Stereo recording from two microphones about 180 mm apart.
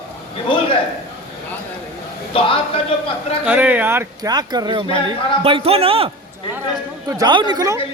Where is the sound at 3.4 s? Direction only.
10° right (ahead or behind); by 6.1 s 30° right (ahead or behind).